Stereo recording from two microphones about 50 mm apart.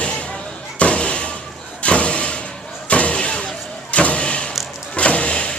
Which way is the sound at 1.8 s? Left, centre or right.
Left.